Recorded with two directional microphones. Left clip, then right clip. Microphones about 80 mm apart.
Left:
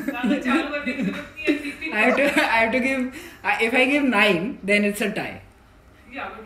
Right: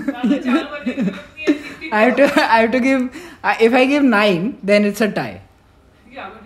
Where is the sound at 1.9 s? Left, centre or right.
Right.